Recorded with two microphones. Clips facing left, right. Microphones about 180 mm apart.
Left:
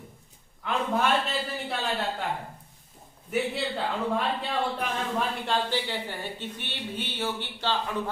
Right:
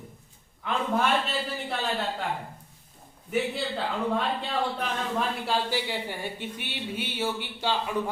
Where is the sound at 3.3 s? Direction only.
Centre (ahead or behind).